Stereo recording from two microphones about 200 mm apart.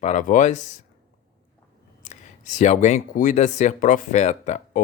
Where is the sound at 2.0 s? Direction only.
35° left (ahead or behind).